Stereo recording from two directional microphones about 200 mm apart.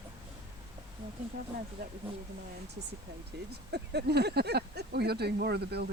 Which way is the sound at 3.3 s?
55° right (ahead or behind).